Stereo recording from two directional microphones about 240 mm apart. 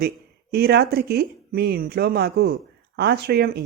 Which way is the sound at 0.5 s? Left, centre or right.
Right.